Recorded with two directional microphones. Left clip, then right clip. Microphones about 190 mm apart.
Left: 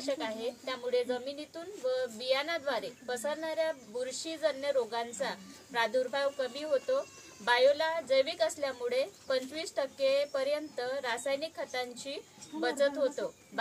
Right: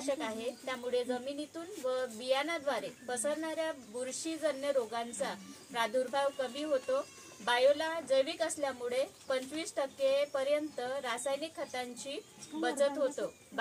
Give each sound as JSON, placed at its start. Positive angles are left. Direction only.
{"t": 0.0, "sound": "a woman's voice", "side_deg": 15}